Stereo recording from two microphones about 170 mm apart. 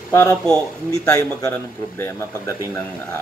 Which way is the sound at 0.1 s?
15° left (ahead or behind).